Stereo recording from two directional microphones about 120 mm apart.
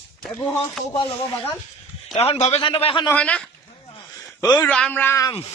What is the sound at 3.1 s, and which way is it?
Speech, 10° left (ahead or behind).